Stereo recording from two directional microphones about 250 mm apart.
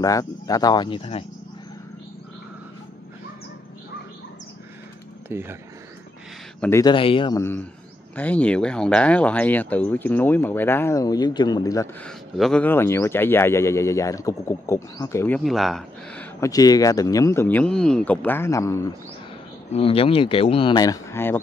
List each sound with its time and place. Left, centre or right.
0.0 s speech: centre
5.3 s speech: centre
6.6 s speech: centre
19.7 s speech: left